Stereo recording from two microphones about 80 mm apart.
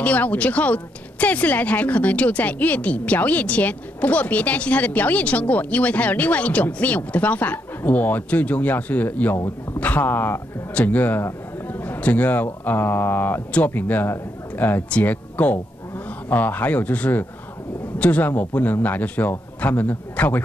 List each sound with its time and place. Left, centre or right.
0.0 s a woman's voice: centre